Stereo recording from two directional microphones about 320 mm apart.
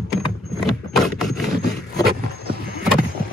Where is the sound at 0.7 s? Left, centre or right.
Centre.